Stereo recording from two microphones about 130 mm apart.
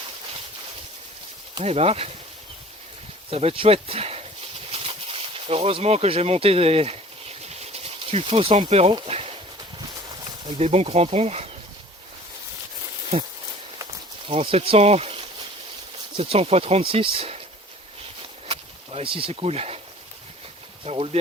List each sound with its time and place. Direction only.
1.6 s speech: 55° right (ahead or behind)
3.2 s speech: 45° right (ahead or behind)
4.7 s a sound: 50° right (ahead or behind)
10.6 s speech: 55° right (ahead or behind)
13.1 s speech: 50° right (ahead or behind)
18.4 s a sound: 45° right (ahead or behind)
20.8 s speech: 50° right (ahead or behind)